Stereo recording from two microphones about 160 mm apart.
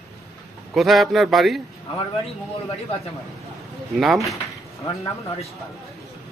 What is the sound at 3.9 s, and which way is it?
Speech, centre (ahead or behind).